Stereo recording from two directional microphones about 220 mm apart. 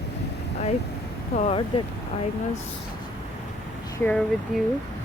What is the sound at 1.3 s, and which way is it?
Speech, 30° left (ahead or behind).